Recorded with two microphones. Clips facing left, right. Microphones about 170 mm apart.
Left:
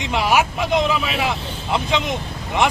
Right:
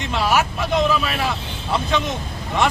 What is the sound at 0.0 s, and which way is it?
Speech, 15° left (ahead or behind).